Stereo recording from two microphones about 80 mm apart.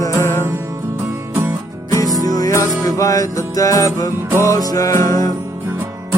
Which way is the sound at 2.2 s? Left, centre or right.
Left.